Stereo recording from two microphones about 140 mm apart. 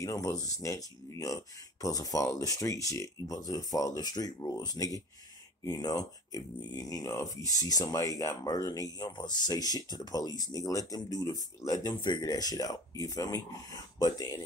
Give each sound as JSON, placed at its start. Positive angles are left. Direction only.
{"t": 0.0, "sound": "speech", "side_deg": 25}